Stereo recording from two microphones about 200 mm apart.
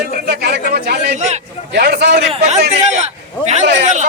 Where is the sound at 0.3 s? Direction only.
55° right (ahead or behind).